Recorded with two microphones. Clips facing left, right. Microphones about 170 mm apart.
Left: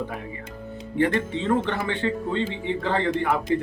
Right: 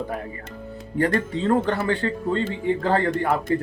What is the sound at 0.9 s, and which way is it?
Speech, 40° right (ahead or behind).